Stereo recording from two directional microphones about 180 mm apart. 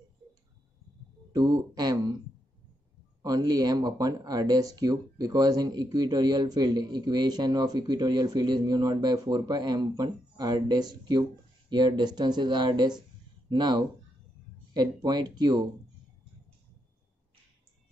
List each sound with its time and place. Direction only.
1.3 s speech: 20° right (ahead or behind)
3.2 s speech: 20° right (ahead or behind)
15.0 s speech: 25° right (ahead or behind)